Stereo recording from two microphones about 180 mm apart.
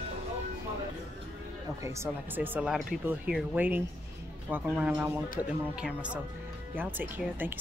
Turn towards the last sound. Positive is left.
turn(degrees=-10)  # may be behind; listen again after turning